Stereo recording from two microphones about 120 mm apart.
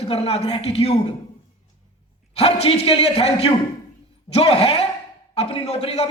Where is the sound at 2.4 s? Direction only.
60° left (ahead or behind).